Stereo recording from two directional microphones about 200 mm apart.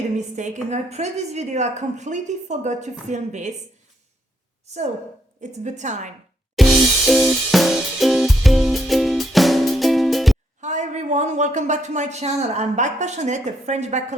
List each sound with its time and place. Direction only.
0.2 s speech: 35° right (ahead or behind)
4.6 s a woman's voice: 35° right (ahead or behind)
6.6 s music: centre (ahead or behind)
10.6 s speech: 35° right (ahead or behind)